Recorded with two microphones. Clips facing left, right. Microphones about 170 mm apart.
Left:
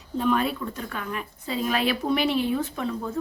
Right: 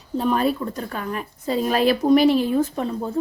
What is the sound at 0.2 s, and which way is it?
A woman's voice, 40° right (ahead or behind).